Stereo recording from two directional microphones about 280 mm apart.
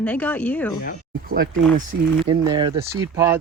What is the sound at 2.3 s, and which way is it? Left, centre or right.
Speech, centre.